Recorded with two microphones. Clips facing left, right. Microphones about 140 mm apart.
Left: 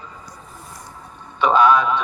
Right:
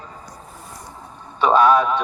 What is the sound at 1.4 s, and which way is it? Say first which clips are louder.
Speech: right 1 dB; 40° right (ahead or behind).